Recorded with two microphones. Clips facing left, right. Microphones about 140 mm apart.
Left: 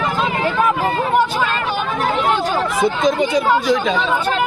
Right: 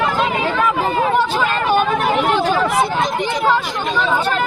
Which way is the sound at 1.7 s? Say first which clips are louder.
Right 4 dB; 60° right (ahead or behind).